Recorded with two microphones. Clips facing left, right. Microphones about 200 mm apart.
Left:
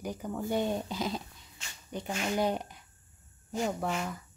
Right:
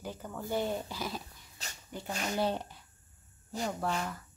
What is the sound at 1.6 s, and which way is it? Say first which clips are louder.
Speech: right 3 dB; 40° right (ahead or behind).